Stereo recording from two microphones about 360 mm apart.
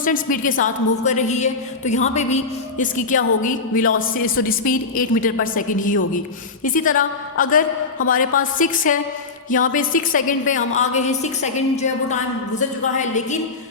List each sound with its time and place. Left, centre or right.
0.0 s a woman's voice: left